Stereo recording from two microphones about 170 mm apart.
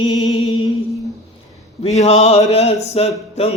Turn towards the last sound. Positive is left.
turn(degrees=35)  # may be behind; listen again after turning